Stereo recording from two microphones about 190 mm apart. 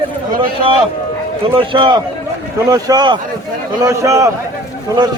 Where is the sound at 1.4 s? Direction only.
30° right (ahead or behind).